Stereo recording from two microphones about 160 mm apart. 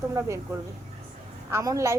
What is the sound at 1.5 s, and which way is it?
Speech, 20° right (ahead or behind).